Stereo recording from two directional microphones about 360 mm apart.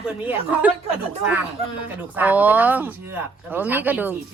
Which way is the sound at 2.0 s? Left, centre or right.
Centre.